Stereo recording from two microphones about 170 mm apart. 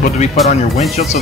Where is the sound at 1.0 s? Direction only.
40° left (ahead or behind).